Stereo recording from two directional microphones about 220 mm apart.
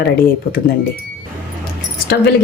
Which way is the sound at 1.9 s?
45° left (ahead or behind).